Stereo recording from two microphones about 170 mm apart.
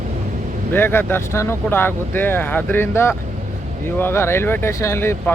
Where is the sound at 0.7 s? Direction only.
10° left (ahead or behind).